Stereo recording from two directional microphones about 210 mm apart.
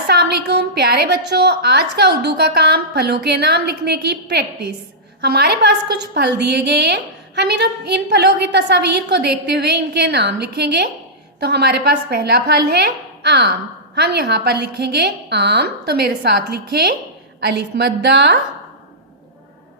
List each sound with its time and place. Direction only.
0.1 s a woman's voice: 50° right (ahead or behind)